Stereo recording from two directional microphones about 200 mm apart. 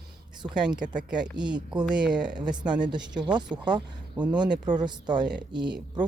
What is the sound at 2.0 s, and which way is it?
Speech, 5° right (ahead or behind).